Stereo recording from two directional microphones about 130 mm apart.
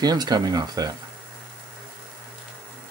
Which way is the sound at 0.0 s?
30° right (ahead or behind).